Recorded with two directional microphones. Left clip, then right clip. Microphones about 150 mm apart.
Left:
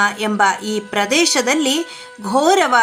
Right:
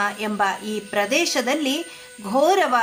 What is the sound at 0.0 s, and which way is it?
A woman's voice, 30° left (ahead or behind).